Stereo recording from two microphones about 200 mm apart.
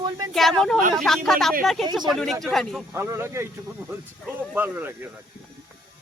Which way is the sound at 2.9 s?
10° right (ahead or behind).